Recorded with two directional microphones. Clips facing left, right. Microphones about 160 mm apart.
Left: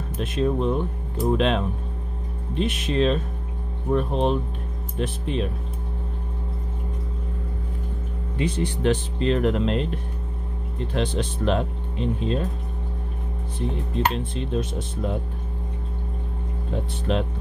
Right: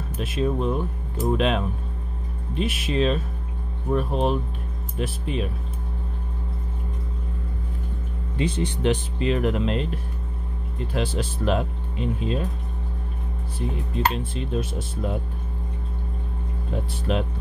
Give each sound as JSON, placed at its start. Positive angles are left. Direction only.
{"t": 0.2, "sound": "speech", "side_deg": -5}
{"t": 8.4, "sound": "speech", "side_deg": -30}
{"t": 9.2, "sound": "speech", "side_deg": -5}
{"t": 13.6, "sound": "speech", "side_deg": -5}
{"t": 16.7, "sound": "speech", "side_deg": -5}